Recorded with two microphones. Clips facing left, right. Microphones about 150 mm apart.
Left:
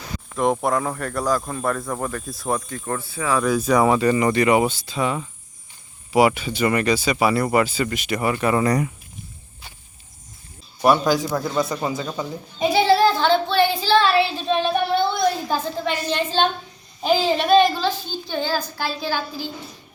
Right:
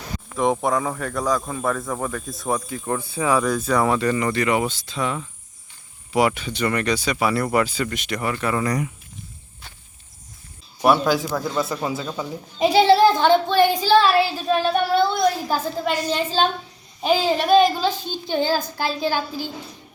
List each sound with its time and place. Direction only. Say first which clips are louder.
0.3 s speech: even; centre (ahead or behind); by 3.4 s 15° right (ahead or behind)
3.6 s speech: left 3 dB; 10° left (ahead or behind)
10.8 s speech: even; centre (ahead or behind)
12.5 s child singing: right 2 dB; 30° right (ahead or behind); by 16.5 s 5° right (ahead or behind)
17.0 s a woman's voice: even; centre (ahead or behind); by 19.5 s 15° right (ahead or behind)